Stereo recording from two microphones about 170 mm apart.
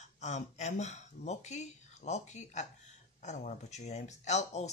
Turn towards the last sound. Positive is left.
turn(degrees=40)  # may be behind; listen again after turning